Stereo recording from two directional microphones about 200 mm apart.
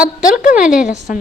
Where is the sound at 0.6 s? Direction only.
5° right (ahead or behind).